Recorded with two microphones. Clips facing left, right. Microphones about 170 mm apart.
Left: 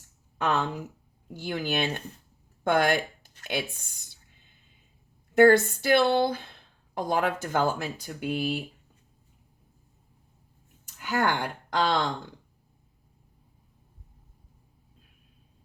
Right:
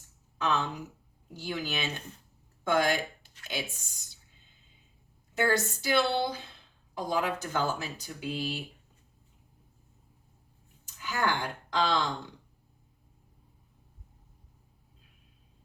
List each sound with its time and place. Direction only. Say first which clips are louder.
0.3 s a woman's voice: left 3 dB; 55° left (ahead or behind)
5.3 s a woman's voice: left 10 dB; 55° left (ahead or behind)
10.8 s speech: left 4 dB; 55° left (ahead or behind)